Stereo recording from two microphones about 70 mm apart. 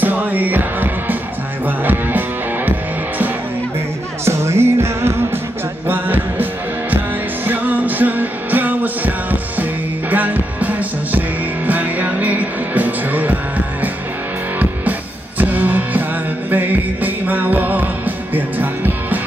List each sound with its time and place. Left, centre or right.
0.0 s music: right
4.2 s music: right
5.9 s music: right
7.4 s music: right